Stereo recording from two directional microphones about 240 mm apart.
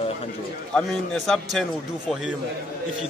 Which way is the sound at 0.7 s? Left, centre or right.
Centre.